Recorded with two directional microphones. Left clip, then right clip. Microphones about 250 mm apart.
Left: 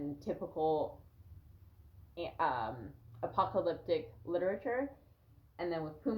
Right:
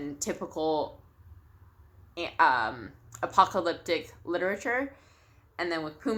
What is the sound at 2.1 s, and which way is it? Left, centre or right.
Speech, centre.